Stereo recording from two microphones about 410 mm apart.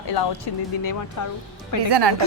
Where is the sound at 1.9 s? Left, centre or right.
Right.